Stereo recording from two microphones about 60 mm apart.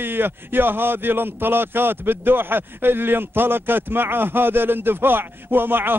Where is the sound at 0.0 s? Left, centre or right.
Right.